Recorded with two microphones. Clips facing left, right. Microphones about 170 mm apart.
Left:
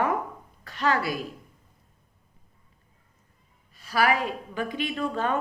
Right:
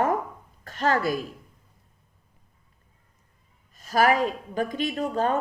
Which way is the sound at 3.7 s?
45° right (ahead or behind).